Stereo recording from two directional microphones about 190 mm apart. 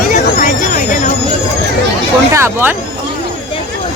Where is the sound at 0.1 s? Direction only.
45° left (ahead or behind).